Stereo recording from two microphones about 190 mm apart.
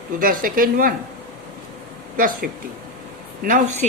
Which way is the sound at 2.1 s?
45° right (ahead or behind).